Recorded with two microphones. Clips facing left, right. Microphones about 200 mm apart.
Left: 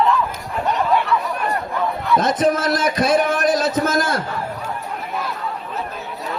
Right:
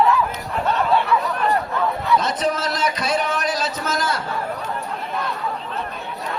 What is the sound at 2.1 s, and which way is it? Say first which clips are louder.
A man's voice: left 6 dB; 50° left (ahead or behind).